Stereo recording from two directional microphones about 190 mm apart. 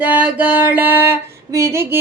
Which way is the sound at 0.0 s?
5° right (ahead or behind).